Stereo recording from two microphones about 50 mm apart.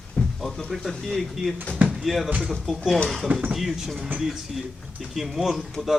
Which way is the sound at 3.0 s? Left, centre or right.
Centre.